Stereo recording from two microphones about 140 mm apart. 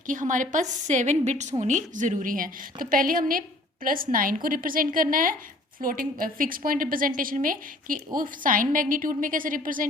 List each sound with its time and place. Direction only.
0.1 s a woman's voice: 65° right (ahead or behind)